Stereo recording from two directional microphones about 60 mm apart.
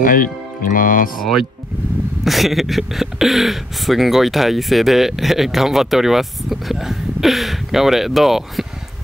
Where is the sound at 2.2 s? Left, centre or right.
Centre.